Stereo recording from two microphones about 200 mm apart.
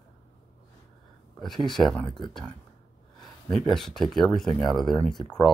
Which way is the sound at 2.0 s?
20° left (ahead or behind).